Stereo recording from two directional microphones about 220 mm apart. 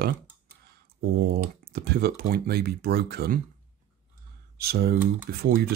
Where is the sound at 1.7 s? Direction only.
45° right (ahead or behind).